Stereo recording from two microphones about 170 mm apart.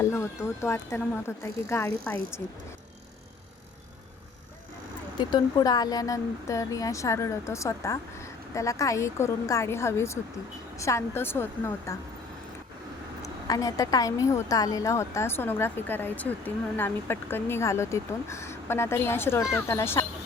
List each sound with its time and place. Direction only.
0.0 s speech: 15° left (ahead or behind)
5.3 s speech: 25° left (ahead or behind)
13.5 s speech: 20° left (ahead or behind)